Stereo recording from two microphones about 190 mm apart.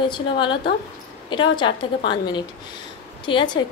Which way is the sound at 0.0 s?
25° left (ahead or behind).